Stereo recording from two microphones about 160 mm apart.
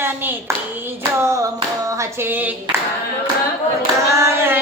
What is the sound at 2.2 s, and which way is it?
Speech, 10° right (ahead or behind).